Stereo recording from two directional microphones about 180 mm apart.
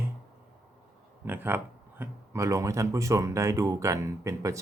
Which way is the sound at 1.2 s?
10° right (ahead or behind).